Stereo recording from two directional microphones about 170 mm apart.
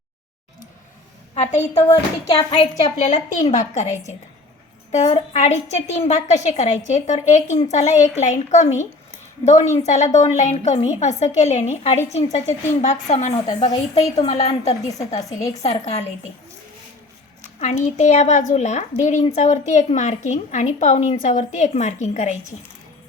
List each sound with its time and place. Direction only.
1.4 s a woman's voice: 40° left (ahead or behind)
17.6 s a woman's voice: 45° left (ahead or behind)